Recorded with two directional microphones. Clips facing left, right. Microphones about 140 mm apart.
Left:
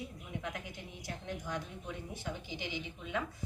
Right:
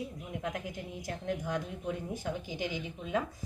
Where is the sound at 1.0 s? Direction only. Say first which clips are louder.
Right 6 dB; 45° right (ahead or behind).